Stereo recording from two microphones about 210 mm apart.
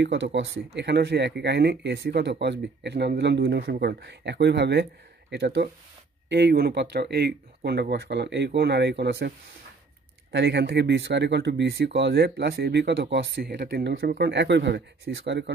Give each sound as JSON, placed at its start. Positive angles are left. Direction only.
{"t": 0.0, "sound": "speech", "side_deg": -60}
{"t": 10.3, "sound": "speech", "side_deg": -55}